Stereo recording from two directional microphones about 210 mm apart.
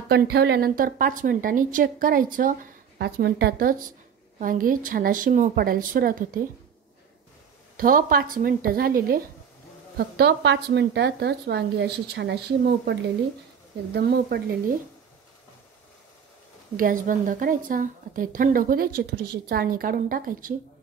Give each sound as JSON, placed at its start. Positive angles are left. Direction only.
{"t": 0.1, "sound": "a woman's voice", "side_deg": -50}
{"t": 7.7, "sound": "speech", "side_deg": -45}
{"t": 16.7, "sound": "a woman's voice", "side_deg": -40}